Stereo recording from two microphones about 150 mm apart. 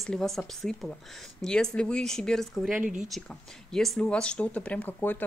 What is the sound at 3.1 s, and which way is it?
Speech, 5° left (ahead or behind).